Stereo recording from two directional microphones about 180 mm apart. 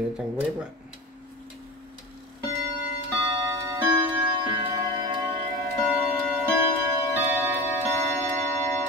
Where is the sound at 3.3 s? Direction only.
25° right (ahead or behind).